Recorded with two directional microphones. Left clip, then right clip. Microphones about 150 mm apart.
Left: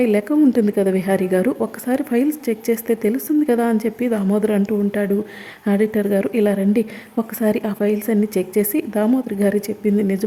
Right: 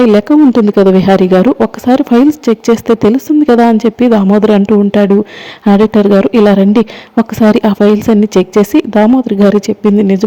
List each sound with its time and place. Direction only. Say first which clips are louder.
0.0 s speech: right 10 dB; 35° right (ahead or behind)